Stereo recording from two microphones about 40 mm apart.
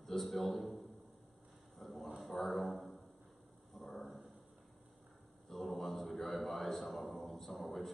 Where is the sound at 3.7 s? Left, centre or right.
Centre.